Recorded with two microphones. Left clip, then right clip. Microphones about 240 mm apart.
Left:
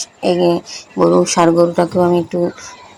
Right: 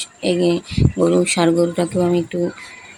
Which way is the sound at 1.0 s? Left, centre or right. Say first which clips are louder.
Left 5 dB; centre.